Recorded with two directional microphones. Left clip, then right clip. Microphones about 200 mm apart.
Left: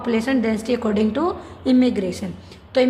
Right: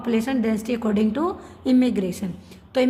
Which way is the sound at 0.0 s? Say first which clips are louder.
Left 3 dB; 25° right (ahead or behind).